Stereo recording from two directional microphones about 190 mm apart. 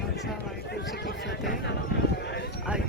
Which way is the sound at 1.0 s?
55° left (ahead or behind).